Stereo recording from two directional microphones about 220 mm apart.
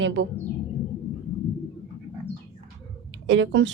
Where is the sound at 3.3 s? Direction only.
55° right (ahead or behind).